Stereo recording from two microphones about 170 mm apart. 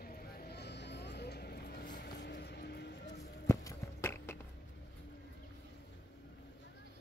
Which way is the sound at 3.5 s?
20° left (ahead or behind).